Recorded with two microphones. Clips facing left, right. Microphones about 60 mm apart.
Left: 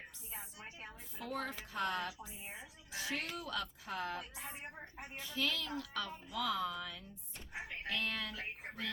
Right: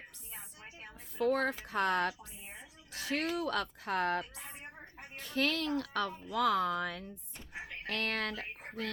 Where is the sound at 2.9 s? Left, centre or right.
Right.